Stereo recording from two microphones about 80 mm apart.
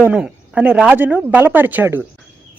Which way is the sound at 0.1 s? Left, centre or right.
Centre.